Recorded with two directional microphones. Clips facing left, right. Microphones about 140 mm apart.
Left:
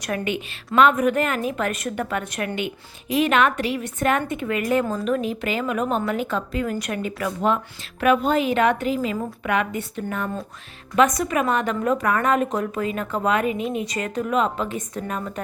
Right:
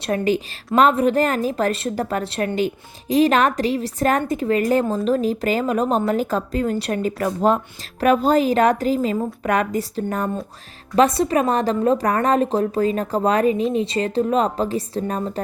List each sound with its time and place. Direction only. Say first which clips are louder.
0.0 s a woman's voice: right 6 dB; 35° right (ahead or behind)